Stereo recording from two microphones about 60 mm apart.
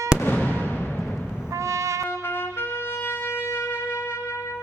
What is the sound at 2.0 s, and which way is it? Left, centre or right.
Wind instrument, left.